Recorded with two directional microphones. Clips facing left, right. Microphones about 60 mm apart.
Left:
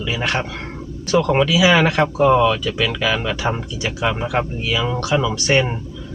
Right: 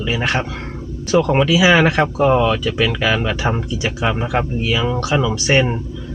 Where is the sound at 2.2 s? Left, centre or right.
Right.